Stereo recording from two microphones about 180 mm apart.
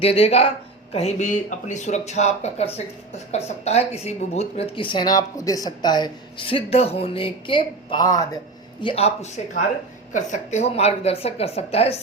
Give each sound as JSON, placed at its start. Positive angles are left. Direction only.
{"t": 0.0, "sound": "speech", "side_deg": 35}
{"t": 8.8, "sound": "speech", "side_deg": 30}